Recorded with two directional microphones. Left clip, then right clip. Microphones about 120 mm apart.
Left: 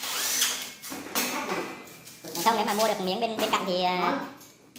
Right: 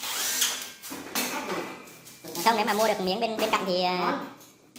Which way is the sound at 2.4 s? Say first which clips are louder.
Right 1 dB; 30° right (ahead or behind).